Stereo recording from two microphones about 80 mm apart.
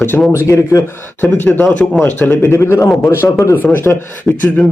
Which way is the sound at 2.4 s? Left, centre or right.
Left.